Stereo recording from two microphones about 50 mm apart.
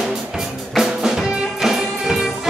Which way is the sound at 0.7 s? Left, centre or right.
Centre.